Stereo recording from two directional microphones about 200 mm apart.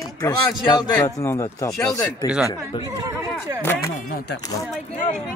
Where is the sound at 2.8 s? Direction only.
20° right (ahead or behind).